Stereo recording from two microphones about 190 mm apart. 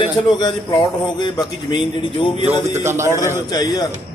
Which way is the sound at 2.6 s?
15° right (ahead or behind).